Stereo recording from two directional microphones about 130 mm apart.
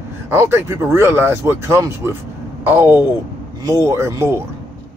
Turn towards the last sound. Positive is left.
turn(degrees=-20)  # may be behind; listen again after turning